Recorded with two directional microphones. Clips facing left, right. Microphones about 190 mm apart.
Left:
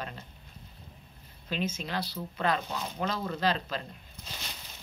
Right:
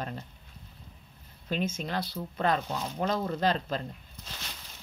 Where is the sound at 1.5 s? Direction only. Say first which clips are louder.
Right 2 dB; 50° right (ahead or behind).